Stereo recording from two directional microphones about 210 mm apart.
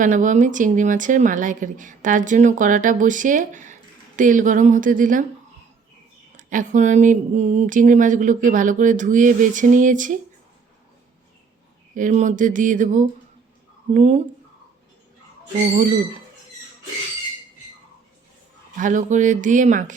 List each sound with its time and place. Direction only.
0.0 s speech: 35° right (ahead or behind)
6.3 s speech: 40° right (ahead or behind)
11.9 s speech: 35° right (ahead or behind)
18.8 s speech: 35° right (ahead or behind)